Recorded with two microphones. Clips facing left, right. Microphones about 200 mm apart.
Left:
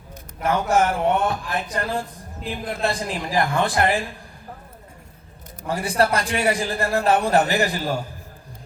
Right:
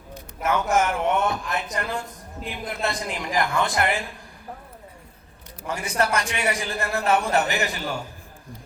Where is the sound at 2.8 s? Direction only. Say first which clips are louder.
Left 3 dB; 30° left (ahead or behind).